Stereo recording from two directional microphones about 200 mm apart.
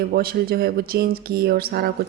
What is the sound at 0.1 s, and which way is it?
Speech, 50° right (ahead or behind).